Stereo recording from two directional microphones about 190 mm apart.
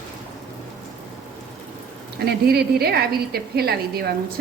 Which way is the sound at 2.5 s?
55° right (ahead or behind).